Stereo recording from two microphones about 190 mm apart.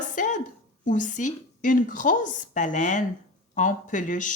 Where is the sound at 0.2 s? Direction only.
40° left (ahead or behind).